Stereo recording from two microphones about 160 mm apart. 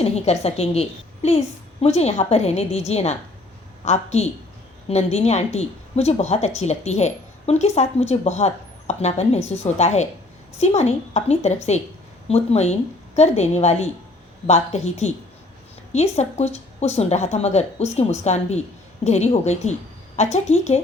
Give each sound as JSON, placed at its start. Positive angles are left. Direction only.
{"t": 0.0, "sound": "a woman's voice", "side_deg": 40}